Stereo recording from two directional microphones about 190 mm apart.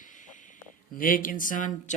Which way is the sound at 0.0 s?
40° left (ahead or behind).